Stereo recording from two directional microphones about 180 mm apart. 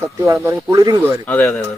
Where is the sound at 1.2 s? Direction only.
10° left (ahead or behind).